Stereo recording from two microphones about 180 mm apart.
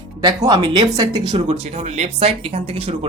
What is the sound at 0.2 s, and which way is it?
Speech, 25° right (ahead or behind).